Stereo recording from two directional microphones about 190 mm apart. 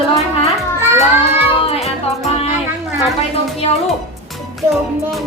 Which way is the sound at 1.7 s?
Centre (ahead or behind).